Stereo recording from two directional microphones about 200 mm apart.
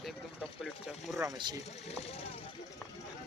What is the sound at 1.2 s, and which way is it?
Speech, 20° right (ahead or behind).